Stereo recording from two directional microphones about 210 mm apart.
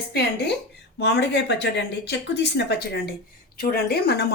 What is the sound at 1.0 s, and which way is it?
Speech, 55° left (ahead or behind).